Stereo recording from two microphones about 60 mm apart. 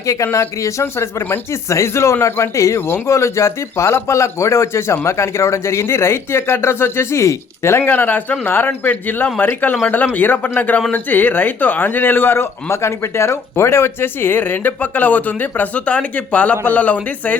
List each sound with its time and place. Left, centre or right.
0.0 s speech: left
1.3 s speech: left
7.8 s speech: left